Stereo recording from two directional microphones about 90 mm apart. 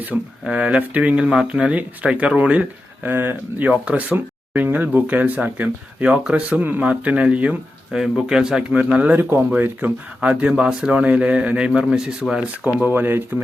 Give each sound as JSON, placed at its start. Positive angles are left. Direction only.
{"t": 0.0, "sound": "speech", "side_deg": -15}
{"t": 12.6, "sound": "speech", "side_deg": -20}